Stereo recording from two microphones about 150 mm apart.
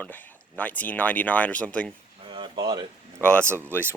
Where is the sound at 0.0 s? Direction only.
10° left (ahead or behind).